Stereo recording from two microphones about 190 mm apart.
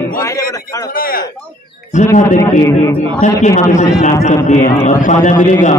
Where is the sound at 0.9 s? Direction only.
50° left (ahead or behind).